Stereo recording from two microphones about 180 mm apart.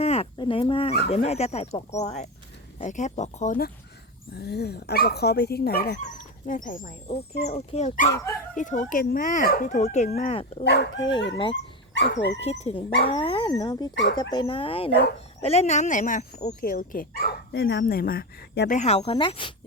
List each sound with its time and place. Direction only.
0.0 s speech: 35° left (ahead or behind)
4.4 s speech: 65° left (ahead or behind); by 6.9 s 50° left (ahead or behind)
7.4 s speech: 35° left (ahead or behind)
10.6 s speech: 70° left (ahead or behind)
12.4 s speech: 35° left (ahead or behind)
13.9 s speech: 80° left
14.2 s speech: 25° left (ahead or behind); by 18.7 s 65° left (ahead or behind)
18.7 s speech: 40° left (ahead or behind)